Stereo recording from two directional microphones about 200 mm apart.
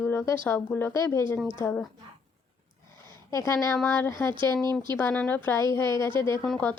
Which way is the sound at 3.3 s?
15° left (ahead or behind).